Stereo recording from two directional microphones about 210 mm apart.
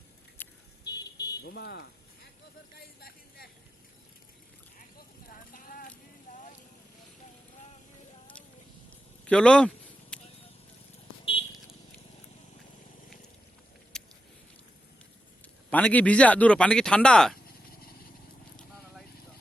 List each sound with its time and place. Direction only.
0.4 s vehicle: 10° left (ahead or behind)
1.4 s speech: 50° left (ahead or behind)
2.7 s vehicle: 50° left (ahead or behind)
4.9 s clip-clop: 40° left (ahead or behind)
6.3 s vehicle: 40° left (ahead or behind)
9.2 s a sound: 5° left (ahead or behind)
13.9 s a sound: 5° left (ahead or behind)
15.7 s a man's voice: 5° left (ahead or behind)